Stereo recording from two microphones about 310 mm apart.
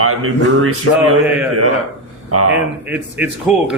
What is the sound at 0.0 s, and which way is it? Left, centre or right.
Speech, right.